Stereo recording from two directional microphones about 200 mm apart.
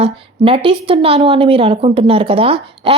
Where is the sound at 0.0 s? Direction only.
25° right (ahead or behind).